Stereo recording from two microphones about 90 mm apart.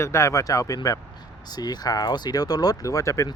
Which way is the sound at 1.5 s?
50° left (ahead or behind).